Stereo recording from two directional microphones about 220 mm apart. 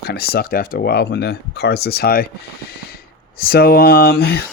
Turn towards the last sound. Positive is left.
turn(degrees=45)  # may be behind; listen again after turning